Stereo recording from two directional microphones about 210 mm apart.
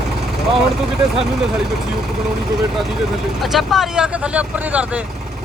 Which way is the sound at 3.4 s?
Centre (ahead or behind).